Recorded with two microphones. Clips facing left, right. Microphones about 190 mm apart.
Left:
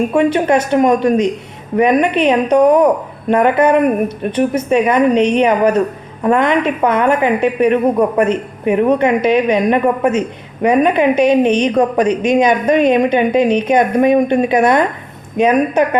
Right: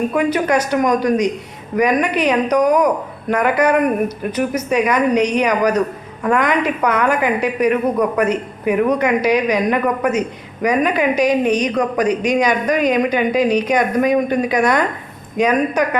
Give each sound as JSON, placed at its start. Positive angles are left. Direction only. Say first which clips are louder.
{"t": 0.1, "sound": "a woman's voice", "louder": "left 4 dB", "side_deg": 30}